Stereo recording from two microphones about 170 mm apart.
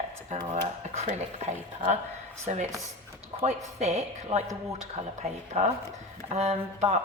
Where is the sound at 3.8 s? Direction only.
40° right (ahead or behind).